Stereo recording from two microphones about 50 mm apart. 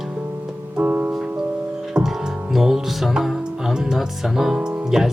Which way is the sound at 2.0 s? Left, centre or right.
Centre.